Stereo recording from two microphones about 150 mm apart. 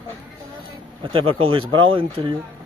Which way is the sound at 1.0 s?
35° right (ahead or behind).